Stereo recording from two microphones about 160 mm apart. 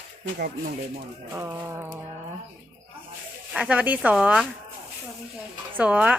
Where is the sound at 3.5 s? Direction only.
5° right (ahead or behind).